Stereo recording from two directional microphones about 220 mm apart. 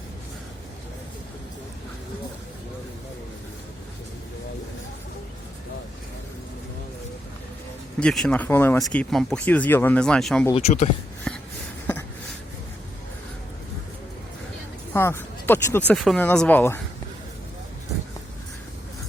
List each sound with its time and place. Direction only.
7.9 s speech: 5° left (ahead or behind)
10.5 s speech: 30° left (ahead or behind)
11.3 s a sound: 5° left (ahead or behind)
14.9 s speech: 10° left (ahead or behind)